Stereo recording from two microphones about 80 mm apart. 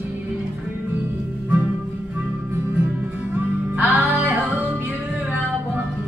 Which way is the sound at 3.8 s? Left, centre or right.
Right.